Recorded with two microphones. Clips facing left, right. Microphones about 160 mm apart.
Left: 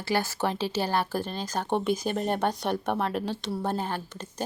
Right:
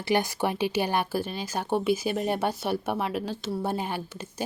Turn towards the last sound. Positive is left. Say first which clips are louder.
# even
turn(degrees=-10)  # may be behind; listen again after turning